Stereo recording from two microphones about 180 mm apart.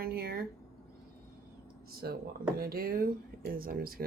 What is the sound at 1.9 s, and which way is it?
Speech, 60° right (ahead or behind).